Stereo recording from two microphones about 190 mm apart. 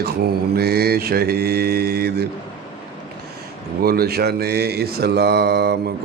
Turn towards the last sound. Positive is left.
turn(degrees=-60)  # may be behind; listen again after turning